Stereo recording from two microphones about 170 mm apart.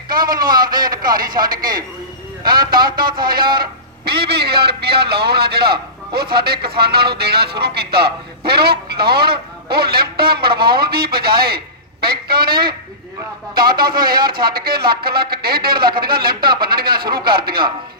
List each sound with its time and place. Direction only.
0.1 s a man's voice: 55° right (ahead or behind)